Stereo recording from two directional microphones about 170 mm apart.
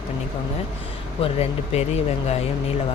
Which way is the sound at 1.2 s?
40° left (ahead or behind).